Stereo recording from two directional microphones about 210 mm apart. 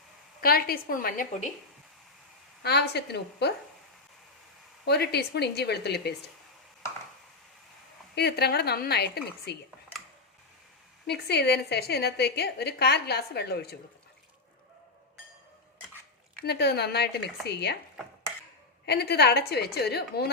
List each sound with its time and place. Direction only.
0.4 s a woman's voice: 45° left (ahead or behind)
2.6 s a woman's voice: 50° left (ahead or behind)
4.9 s a woman's voice: 50° left (ahead or behind)
8.1 s a woman's voice: 50° left (ahead or behind)
11.0 s a woman's voice: 50° left (ahead or behind)
16.4 s a woman's voice: 50° left (ahead or behind)
18.9 s a woman's voice: 50° left (ahead or behind)